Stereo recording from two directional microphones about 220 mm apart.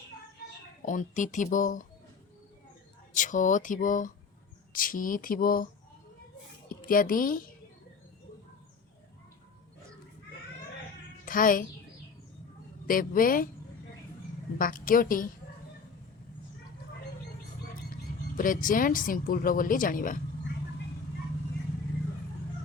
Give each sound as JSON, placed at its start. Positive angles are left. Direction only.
{"t": 0.9, "sound": "a woman's voice", "side_deg": 35}
{"t": 3.2, "sound": "a woman's voice", "side_deg": 35}
{"t": 6.7, "sound": "a woman's voice", "side_deg": 40}
{"t": 11.3, "sound": "a child's voice", "side_deg": 40}
{"t": 12.9, "sound": "a woman's voice", "side_deg": 40}
{"t": 14.6, "sound": "a woman's voice", "side_deg": 40}
{"t": 18.3, "sound": "a woman's voice", "side_deg": 40}